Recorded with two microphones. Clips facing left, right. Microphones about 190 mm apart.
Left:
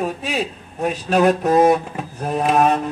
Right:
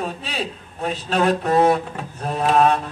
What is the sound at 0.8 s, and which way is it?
Mantra, 15° left (ahead or behind).